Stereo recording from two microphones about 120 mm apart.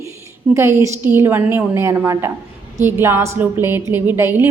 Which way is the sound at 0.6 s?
20° right (ahead or behind).